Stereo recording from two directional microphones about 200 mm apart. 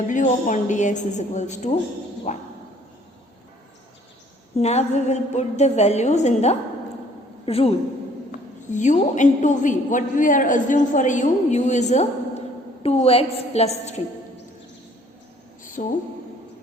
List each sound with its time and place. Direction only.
0.1 s a woman's voice: 40° left (ahead or behind)
4.5 s a woman's voice: 35° left (ahead or behind)
8.7 s a woman's voice: 40° left (ahead or behind)
15.6 s a sound: 40° left (ahead or behind)